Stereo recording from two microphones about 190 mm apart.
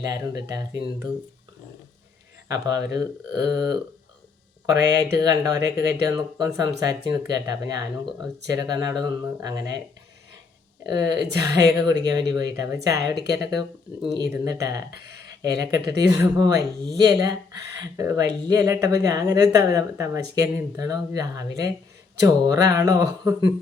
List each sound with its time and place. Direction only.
0.0 s speech: 20° right (ahead or behind)
2.5 s speech: 20° right (ahead or behind)
10.8 s speech: 20° right (ahead or behind)